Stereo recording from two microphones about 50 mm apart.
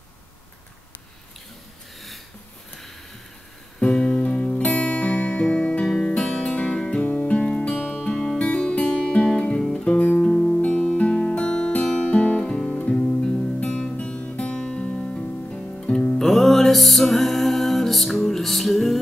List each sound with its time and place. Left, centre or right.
3.8 s music: centre
5.9 s music: centre
10.2 s music: left
16.2 s music: centre